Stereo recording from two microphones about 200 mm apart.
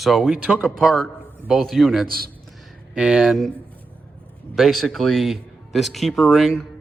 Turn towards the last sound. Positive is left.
turn(degrees=0)  # may be behind; listen again after turning